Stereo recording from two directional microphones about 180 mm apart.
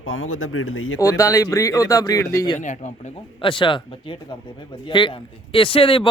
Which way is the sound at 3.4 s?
25° left (ahead or behind).